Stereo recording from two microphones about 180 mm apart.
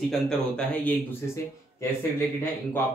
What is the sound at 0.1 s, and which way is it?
Speech, 5° left (ahead or behind).